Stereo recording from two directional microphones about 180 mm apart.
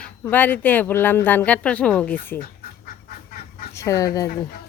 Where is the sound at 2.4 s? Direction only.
55° left (ahead or behind).